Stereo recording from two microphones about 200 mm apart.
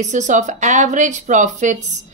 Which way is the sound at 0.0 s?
40° right (ahead or behind).